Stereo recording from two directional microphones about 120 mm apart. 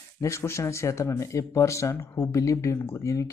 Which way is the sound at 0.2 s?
25° left (ahead or behind).